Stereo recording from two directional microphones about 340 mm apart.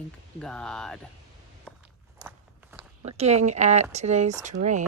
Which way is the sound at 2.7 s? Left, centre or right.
Centre.